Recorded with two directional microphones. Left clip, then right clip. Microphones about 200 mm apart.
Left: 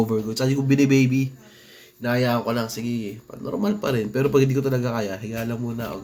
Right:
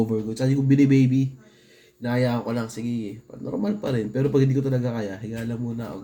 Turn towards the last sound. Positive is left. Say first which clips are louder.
# left 3 dB
turn(degrees=-15)  # may be behind; listen again after turning